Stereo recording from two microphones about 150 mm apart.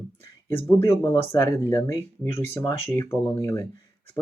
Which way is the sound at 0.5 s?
15° left (ahead or behind).